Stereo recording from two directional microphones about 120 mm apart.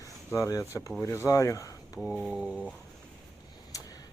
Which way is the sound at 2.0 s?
Centre (ahead or behind).